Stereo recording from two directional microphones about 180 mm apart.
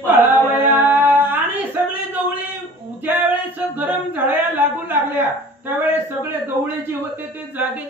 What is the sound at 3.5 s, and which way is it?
Speech, 10° right (ahead or behind).